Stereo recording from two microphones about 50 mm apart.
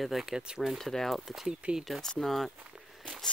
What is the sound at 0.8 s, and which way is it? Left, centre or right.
Speech, centre.